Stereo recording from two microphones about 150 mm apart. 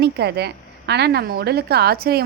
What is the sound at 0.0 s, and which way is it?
A woman's voice, 90° right.